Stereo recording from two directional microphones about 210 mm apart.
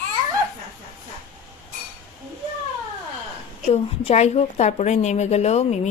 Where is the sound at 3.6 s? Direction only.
30° left (ahead or behind).